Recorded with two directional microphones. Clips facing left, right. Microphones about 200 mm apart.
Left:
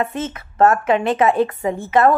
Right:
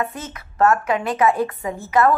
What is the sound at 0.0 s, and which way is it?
A woman's voice, 25° left (ahead or behind).